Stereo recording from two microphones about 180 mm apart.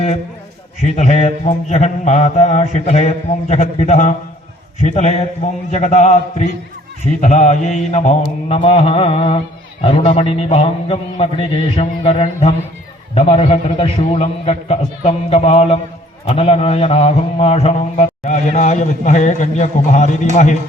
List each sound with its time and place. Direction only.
0.8 s a man's voice: 40° left (ahead or behind)